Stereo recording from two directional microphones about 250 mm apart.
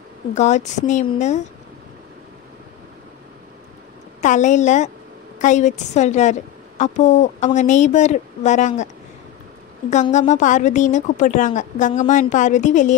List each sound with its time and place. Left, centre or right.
0.3 s a woman's voice: left
4.2 s a woman's voice: left
9.8 s a woman's voice: left